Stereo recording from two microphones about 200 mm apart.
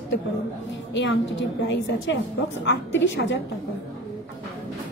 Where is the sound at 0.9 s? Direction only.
65° left (ahead or behind).